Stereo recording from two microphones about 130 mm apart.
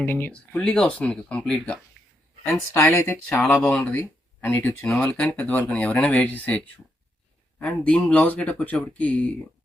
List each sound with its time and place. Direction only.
0.0 s speech: 15° left (ahead or behind)
0.6 s speech: 5° left (ahead or behind)
2.5 s speech: 20° left (ahead or behind)
7.6 s speech: 10° left (ahead or behind)